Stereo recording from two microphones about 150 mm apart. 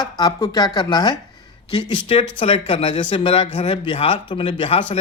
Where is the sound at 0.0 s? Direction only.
25° left (ahead or behind).